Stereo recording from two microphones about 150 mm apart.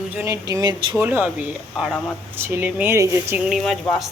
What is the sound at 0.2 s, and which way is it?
Speech, 20° right (ahead or behind).